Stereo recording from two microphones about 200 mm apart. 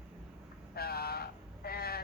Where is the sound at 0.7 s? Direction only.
50° left (ahead or behind).